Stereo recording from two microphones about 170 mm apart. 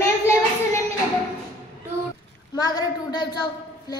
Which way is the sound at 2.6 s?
25° left (ahead or behind).